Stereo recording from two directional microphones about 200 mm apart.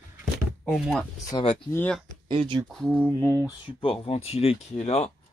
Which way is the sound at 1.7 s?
5° left (ahead or behind).